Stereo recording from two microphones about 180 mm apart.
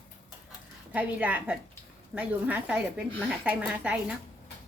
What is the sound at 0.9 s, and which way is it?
A woman's voice, 10° right (ahead or behind).